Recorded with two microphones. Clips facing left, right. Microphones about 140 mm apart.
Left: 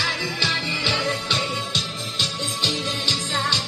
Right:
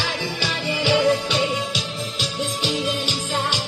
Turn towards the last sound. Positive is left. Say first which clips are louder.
# right 2 dB
turn(degrees=-10)  # may be behind; listen again after turning